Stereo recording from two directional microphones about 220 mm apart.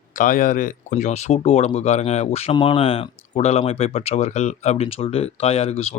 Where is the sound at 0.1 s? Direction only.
35° left (ahead or behind).